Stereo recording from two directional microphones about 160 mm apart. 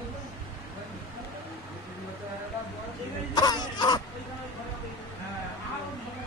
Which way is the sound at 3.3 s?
25° left (ahead or behind).